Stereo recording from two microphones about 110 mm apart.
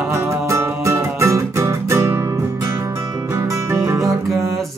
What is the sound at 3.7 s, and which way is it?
Music, 25° right (ahead or behind).